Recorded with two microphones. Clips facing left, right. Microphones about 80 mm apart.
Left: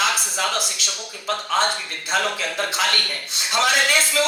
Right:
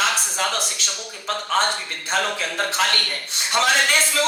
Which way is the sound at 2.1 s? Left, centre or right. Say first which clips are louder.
Even; right.